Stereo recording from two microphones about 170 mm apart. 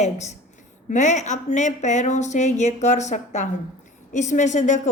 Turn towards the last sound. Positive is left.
turn(degrees=45)  # may be behind; listen again after turning